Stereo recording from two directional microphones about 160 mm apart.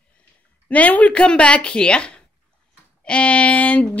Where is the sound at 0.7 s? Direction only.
10° left (ahead or behind).